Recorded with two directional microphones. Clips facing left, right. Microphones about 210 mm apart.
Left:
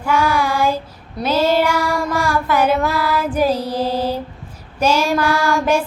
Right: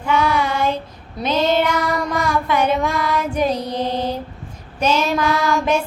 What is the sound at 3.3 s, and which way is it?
Mantra, 5° left (ahead or behind).